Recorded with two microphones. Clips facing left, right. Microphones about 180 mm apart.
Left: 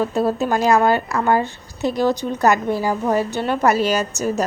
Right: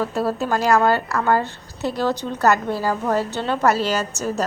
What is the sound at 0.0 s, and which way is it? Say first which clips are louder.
A woman's voice: left 3 dB; 20° left (ahead or behind).